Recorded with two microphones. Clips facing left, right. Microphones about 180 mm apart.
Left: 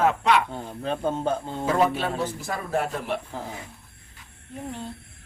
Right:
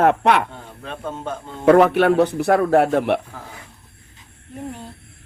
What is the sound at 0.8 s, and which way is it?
Speech, 30° left (ahead or behind).